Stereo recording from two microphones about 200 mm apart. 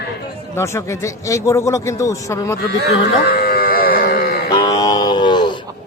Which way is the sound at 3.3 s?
50° left (ahead or behind).